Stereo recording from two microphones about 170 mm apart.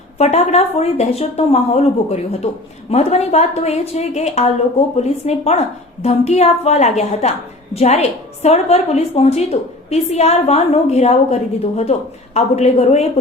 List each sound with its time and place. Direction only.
0.2 s a woman's voice: 40° left (ahead or behind)